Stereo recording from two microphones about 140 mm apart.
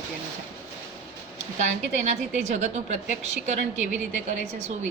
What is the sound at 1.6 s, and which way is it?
A woman's voice, 60° right (ahead or behind).